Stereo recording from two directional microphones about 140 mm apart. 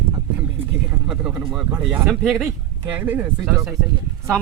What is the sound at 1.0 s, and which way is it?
Speech, 5° right (ahead or behind).